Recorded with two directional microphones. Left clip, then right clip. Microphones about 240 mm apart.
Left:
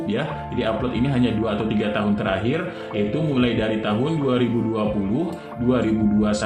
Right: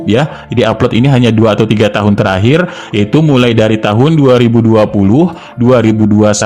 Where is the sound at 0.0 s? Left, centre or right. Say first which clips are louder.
Right 13 dB; right.